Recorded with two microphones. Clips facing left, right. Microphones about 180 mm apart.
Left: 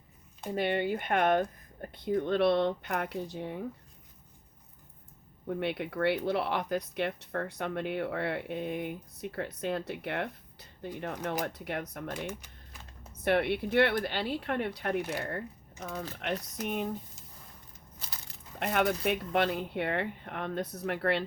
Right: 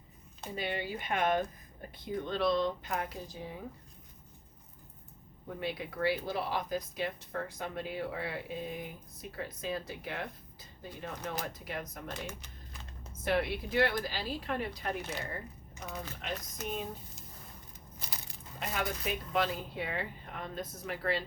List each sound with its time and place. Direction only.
0.5 s speech: 60° left (ahead or behind)
5.5 s speech: 65° left (ahead or behind)
12.2 s typing: 10° left (ahead or behind)
13.2 s speech: 65° left (ahead or behind)
16.2 s speech: 65° left (ahead or behind)
18.0 s a sound: 15° right (ahead or behind)
18.6 s speech: 65° left (ahead or behind)